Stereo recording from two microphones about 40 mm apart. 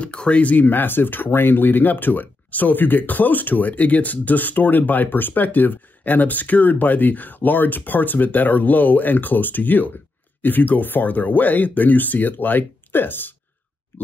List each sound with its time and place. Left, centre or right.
0.0 s speech: left